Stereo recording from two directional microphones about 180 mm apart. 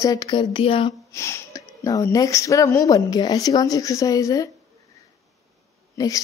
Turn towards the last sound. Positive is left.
turn(degrees=20)  # may be behind; listen again after turning